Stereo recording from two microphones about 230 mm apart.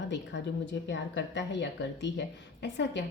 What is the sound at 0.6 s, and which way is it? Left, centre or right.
Speech, left.